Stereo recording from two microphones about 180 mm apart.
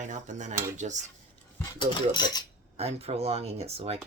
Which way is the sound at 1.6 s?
25° left (ahead or behind).